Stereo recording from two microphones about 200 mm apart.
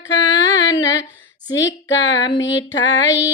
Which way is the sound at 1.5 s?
65° left (ahead or behind).